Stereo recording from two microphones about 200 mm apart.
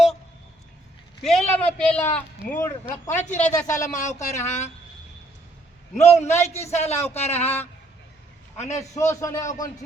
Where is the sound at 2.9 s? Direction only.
35° left (ahead or behind).